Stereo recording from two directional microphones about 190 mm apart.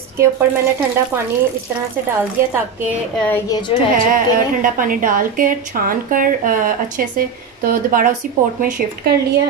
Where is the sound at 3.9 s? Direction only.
45° right (ahead or behind).